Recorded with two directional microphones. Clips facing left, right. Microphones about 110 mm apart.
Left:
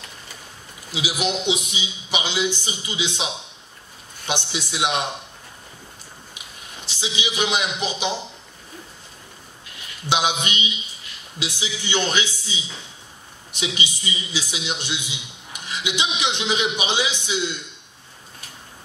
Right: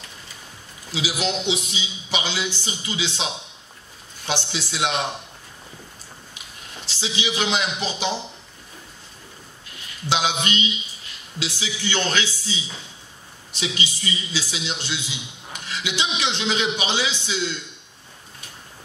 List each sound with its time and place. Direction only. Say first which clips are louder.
0.9 s a man's voice: even; 15° left (ahead or behind)
4.3 s a man's voice: even; 15° left (ahead or behind)
6.9 s a man's voice: right 1 dB; 15° left (ahead or behind)
10.0 s a man's voice: left 1 dB; 15° left (ahead or behind)